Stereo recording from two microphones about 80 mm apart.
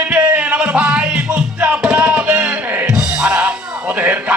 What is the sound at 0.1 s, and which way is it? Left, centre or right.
Music, centre.